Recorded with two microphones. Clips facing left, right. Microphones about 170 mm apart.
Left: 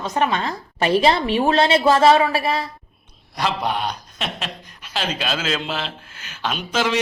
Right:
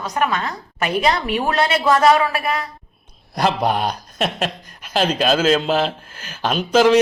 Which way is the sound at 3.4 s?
45° right (ahead or behind).